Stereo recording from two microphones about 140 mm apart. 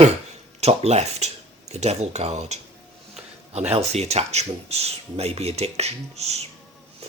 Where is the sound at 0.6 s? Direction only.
50° right (ahead or behind).